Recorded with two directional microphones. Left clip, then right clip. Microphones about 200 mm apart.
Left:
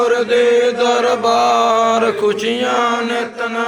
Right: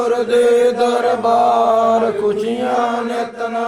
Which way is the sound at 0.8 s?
20° right (ahead or behind).